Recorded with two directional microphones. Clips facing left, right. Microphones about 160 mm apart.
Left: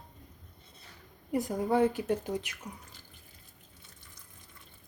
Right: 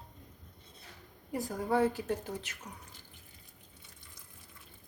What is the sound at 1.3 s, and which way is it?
Speech, 20° left (ahead or behind).